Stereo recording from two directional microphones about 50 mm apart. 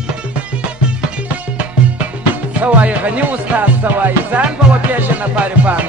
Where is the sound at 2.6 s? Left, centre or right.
Right.